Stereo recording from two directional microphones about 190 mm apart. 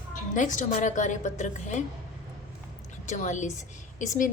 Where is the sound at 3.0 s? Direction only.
40° left (ahead or behind).